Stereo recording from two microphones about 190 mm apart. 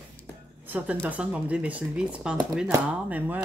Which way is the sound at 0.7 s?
5° right (ahead or behind).